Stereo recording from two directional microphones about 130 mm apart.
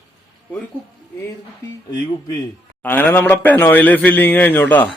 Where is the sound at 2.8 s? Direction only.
15° left (ahead or behind).